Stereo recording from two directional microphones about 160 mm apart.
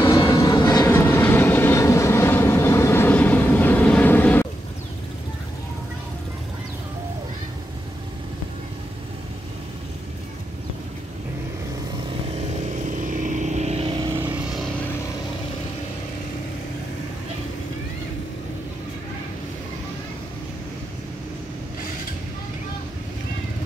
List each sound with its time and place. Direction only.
0.2 s train: 20° left (ahead or behind)
12.1 s vehicle: 40° right (ahead or behind)
13.9 s vehicle: 20° right (ahead or behind)